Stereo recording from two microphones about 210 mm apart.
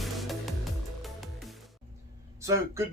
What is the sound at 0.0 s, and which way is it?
Music, centre (ahead or behind).